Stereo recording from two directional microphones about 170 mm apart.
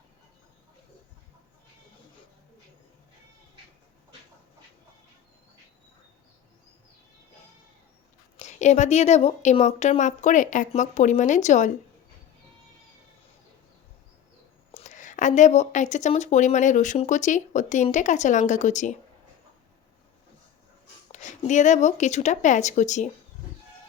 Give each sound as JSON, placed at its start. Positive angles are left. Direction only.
{"t": 8.4, "sound": "speech", "side_deg": 45}
{"t": 14.7, "sound": "speech", "side_deg": 45}
{"t": 21.1, "sound": "speech", "side_deg": 45}